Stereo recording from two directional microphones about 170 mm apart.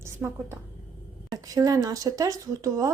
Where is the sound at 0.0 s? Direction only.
15° right (ahead or behind).